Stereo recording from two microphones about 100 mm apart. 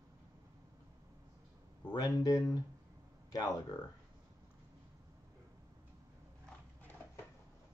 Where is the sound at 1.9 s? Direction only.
40° left (ahead or behind).